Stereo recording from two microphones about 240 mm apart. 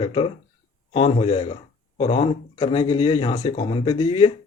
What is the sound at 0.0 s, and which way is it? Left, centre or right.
Speech, left.